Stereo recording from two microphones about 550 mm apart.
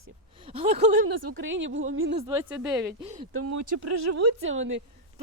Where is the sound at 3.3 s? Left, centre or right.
Right.